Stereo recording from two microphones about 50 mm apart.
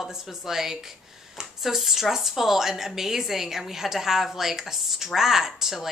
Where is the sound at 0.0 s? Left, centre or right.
Centre.